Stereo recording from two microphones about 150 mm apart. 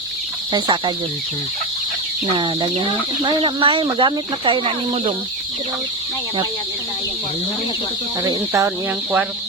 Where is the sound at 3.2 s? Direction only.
35° right (ahead or behind).